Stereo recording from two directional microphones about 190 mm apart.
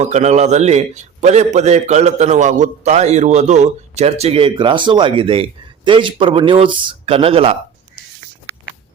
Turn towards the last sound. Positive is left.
turn(degrees=-30)  # may be behind; listen again after turning